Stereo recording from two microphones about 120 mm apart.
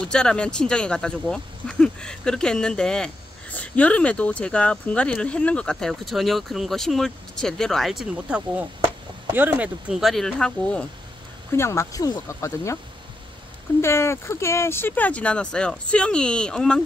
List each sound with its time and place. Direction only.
0.0 s speech: 5° left (ahead or behind)
11.5 s speech: 20° left (ahead or behind)
13.7 s speech: 25° left (ahead or behind); by 16.8 s 5° left (ahead or behind)